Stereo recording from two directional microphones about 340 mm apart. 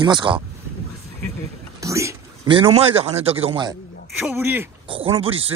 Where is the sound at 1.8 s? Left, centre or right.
Centre.